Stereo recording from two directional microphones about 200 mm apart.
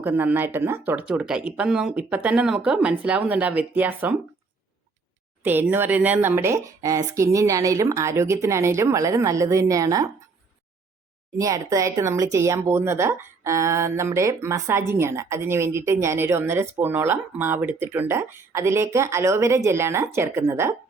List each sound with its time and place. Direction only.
0.0 s speech: 10° right (ahead or behind)
5.4 s speech: 10° right (ahead or behind)
11.3 s speech: 15° right (ahead or behind)